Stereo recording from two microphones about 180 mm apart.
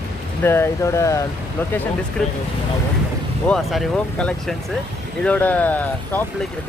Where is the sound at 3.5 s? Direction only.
Centre (ahead or behind).